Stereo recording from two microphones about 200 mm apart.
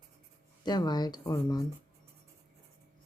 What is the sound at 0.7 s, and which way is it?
Speech, 20° left (ahead or behind).